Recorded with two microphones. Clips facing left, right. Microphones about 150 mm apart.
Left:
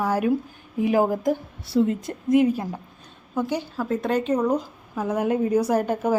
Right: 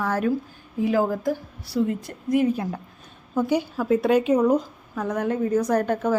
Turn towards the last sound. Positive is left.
turn(degrees=5)  # may be behind; listen again after turning